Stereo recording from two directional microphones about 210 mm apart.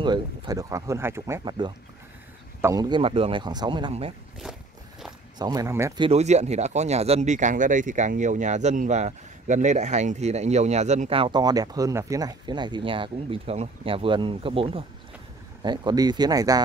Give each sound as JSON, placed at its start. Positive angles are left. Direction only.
{"t": 0.0, "sound": "speech", "side_deg": -20}
{"t": 5.4, "sound": "speech", "side_deg": -15}
{"t": 6.0, "sound": "speech", "side_deg": -30}